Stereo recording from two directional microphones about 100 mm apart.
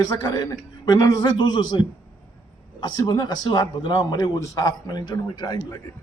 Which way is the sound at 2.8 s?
45° left (ahead or behind).